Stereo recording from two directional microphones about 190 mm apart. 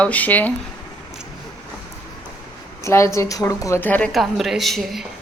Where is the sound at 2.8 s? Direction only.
15° left (ahead or behind).